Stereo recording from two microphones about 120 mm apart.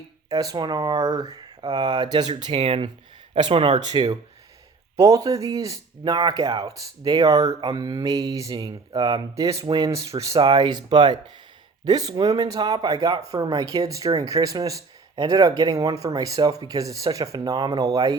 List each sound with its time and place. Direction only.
0.3 s speech: 30° right (ahead or behind)
2.5 s speech: 55° right (ahead or behind)
3.8 s speech: 35° right (ahead or behind)
9.6 s speech: 40° right (ahead or behind)
9.9 s speech: 30° right (ahead or behind)